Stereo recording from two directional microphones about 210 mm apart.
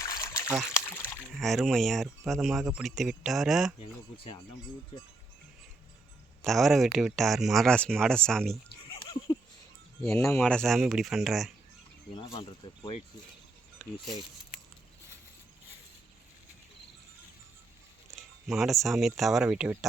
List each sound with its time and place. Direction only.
0.0 s trickle: 15° left (ahead or behind)
0.7 s a sound: 15° left (ahead or behind)
1.1 s speech: centre (ahead or behind)
3.8 s speech: 25° left (ahead or behind)
6.4 s speech: centre (ahead or behind)
10.1 s speech: 10° left (ahead or behind)
12.1 s speech: 20° left (ahead or behind)
18.2 s speech: centre (ahead or behind)